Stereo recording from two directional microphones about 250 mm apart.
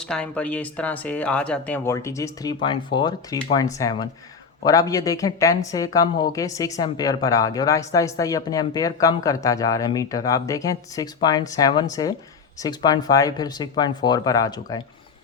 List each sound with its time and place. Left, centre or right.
0.0 s speech: centre